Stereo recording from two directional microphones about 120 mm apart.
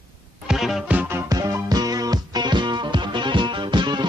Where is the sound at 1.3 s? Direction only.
30° right (ahead or behind).